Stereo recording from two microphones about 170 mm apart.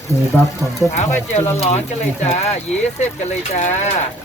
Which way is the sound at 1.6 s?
40° left (ahead or behind).